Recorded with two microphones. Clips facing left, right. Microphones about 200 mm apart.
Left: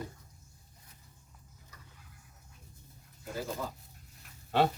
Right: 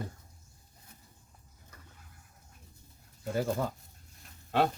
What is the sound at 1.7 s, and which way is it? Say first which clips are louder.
Vehicle: right 2 dB; 55° right (ahead or behind).